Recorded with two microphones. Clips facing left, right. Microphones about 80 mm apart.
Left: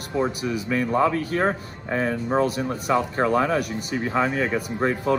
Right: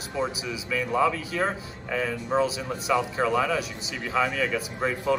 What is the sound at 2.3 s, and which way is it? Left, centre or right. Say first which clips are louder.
A man's voice: left 1 dB; left.